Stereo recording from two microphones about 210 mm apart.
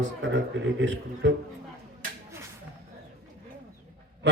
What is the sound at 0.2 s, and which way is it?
A man's voice, 60° right (ahead or behind).